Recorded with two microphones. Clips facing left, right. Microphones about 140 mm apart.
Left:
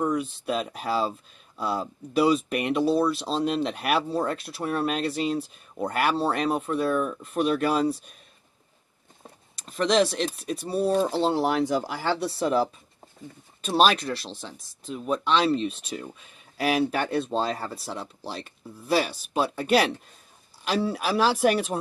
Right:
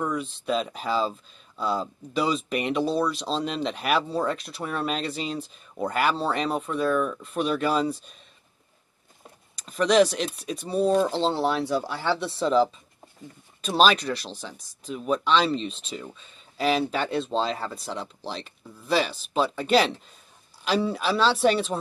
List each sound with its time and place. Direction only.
0.1 s speech: 5° left (ahead or behind)
9.9 s speech: centre (ahead or behind)
13.7 s speech: centre (ahead or behind)